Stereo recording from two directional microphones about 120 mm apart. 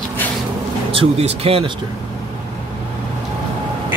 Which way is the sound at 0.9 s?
55° right (ahead or behind).